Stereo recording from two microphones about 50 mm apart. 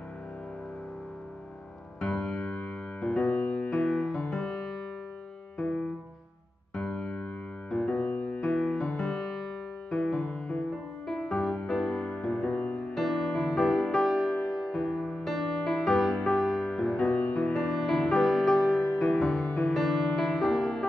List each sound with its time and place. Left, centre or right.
2.0 s music: centre
3.7 s music: centre
6.7 s music: centre
7.7 s music: left
8.4 s music: centre
10.1 s music: left
11.1 s music: centre